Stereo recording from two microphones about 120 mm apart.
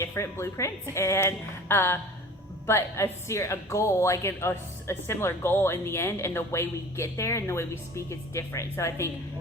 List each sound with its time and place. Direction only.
0.0 s speech: 25° left (ahead or behind)